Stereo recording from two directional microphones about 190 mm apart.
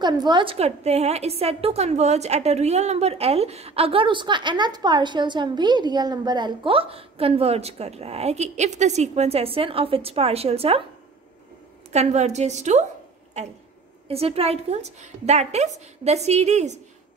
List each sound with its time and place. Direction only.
0.0 s a woman's voice: 25° right (ahead or behind)
11.9 s a woman's voice: 35° right (ahead or behind)